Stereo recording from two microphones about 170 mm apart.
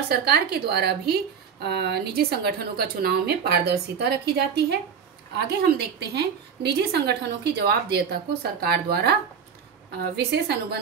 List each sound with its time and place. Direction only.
0.1 s a woman's voice: 70° right (ahead or behind)
10.1 s a woman's voice: 75° right (ahead or behind)